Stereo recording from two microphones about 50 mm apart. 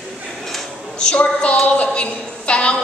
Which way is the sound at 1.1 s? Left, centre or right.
Left.